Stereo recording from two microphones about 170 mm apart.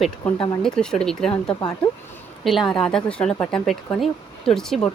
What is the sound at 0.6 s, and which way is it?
Speech, 5° left (ahead or behind).